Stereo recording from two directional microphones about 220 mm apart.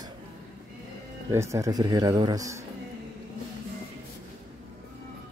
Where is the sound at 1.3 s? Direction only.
15° right (ahead or behind).